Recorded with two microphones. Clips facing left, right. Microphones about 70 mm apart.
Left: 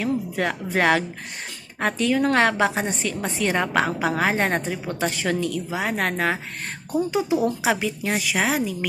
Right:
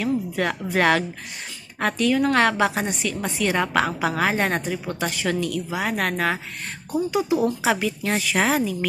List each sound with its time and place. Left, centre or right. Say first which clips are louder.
0.0 s a woman's voice: right 1 dB; left
8.4 s speech: right 2 dB; centre